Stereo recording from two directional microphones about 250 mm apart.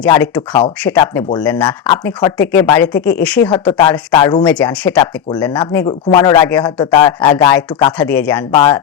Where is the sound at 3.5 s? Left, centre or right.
Centre.